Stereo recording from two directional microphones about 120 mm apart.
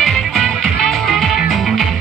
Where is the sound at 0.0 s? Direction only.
5° left (ahead or behind).